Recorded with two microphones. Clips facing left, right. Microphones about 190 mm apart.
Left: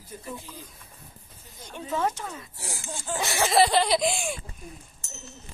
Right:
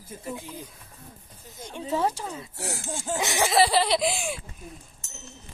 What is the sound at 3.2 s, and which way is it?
Speech, 20° right (ahead or behind).